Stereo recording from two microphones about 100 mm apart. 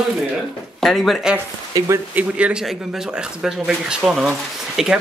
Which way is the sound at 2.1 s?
10° right (ahead or behind).